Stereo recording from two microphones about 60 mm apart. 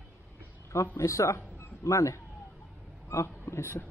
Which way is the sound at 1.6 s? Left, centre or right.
Left.